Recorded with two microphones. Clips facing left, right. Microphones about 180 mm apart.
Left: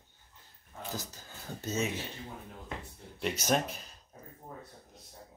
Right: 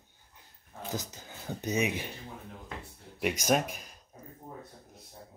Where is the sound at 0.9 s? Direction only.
20° right (ahead or behind).